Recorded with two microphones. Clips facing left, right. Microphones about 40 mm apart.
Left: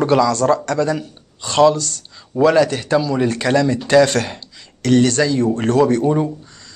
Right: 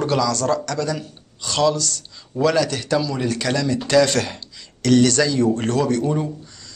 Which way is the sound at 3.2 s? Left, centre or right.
Left.